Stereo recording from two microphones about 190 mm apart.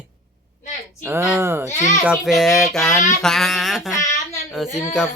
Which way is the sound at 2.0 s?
5° right (ahead or behind).